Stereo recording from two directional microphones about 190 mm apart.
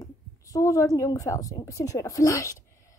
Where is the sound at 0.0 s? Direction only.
15° left (ahead or behind).